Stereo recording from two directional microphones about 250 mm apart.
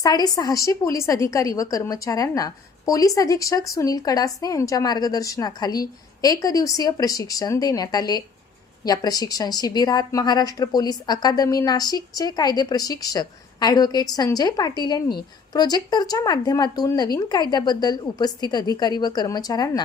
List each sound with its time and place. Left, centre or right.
0.0 s a woman's voice: centre